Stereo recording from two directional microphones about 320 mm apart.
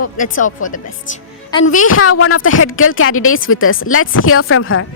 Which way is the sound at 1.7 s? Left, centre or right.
Left.